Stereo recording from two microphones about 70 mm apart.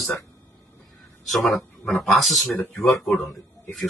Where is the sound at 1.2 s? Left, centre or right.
Centre.